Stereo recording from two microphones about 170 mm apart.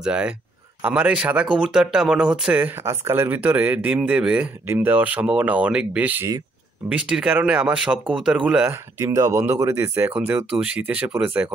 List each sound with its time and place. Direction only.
0.0 s speech: 5° right (ahead or behind)
9.0 s speech: 20° right (ahead or behind)